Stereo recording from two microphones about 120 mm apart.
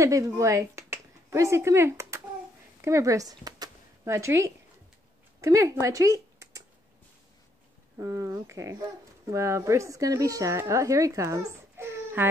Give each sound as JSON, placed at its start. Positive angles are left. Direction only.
{"t": 0.0, "sound": "speech", "side_deg": -25}
{"t": 8.0, "sound": "speech", "side_deg": -25}